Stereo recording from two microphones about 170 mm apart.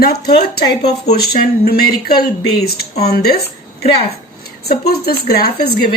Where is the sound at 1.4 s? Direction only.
65° left (ahead or behind).